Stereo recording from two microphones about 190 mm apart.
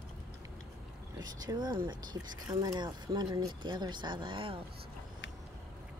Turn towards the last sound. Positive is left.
turn(degrees=-25)  # may be behind; listen again after turning